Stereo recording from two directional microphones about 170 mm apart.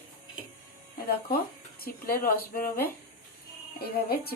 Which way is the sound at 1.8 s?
60° left (ahead or behind).